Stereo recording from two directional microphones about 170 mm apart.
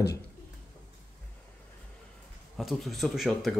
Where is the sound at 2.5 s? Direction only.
Centre (ahead or behind).